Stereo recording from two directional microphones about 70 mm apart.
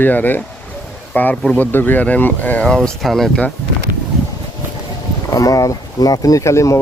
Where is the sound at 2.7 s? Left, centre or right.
Centre.